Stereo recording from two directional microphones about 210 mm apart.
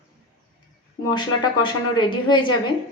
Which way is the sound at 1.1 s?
20° left (ahead or behind).